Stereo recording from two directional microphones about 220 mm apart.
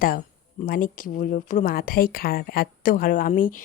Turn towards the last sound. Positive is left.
turn(degrees=40)  # may be behind; listen again after turning